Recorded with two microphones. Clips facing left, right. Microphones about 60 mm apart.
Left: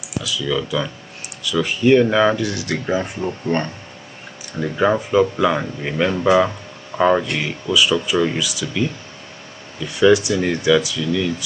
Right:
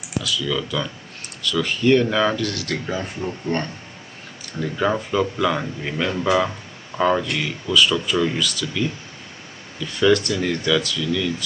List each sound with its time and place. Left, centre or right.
0.2 s speech: centre
3.0 s speech: left
4.6 s speech: centre
9.9 s speech: centre
10.3 s speech: left
10.6 s speech: centre